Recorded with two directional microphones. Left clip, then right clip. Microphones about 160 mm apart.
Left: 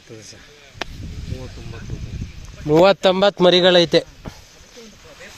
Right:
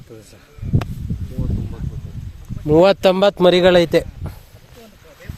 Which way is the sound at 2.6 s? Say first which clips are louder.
Right 1 dB; 30° right (ahead or behind).